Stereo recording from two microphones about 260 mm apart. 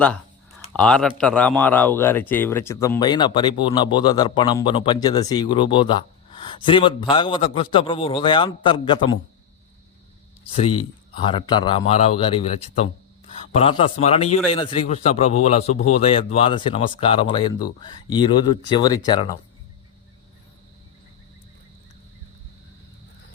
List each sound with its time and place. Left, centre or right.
0.8 s a man's voice: centre
11.3 s a man's voice: centre